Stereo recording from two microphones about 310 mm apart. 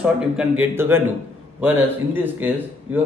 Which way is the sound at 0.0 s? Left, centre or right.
Centre.